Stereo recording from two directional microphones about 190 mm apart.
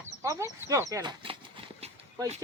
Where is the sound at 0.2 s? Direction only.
15° right (ahead or behind).